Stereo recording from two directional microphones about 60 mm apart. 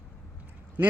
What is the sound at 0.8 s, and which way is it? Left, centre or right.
Speech, right.